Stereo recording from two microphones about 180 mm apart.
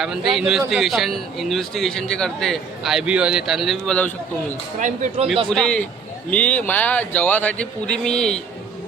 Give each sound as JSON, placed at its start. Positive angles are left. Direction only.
{"t": 0.0, "sound": "a man's voice", "side_deg": 0}
{"t": 4.8, "sound": "speech", "side_deg": -40}
{"t": 5.5, "sound": "a man's voice", "side_deg": 5}